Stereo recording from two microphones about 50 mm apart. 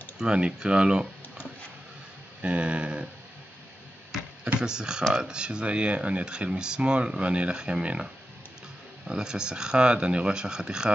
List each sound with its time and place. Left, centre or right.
0.2 s speech: centre
2.4 s speech: right
4.6 s speech: centre